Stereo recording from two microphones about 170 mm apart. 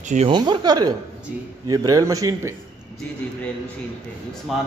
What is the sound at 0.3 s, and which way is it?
A man's voice, 25° right (ahead or behind).